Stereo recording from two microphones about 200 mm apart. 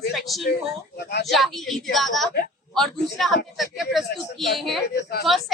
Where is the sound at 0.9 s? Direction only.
55° left (ahead or behind).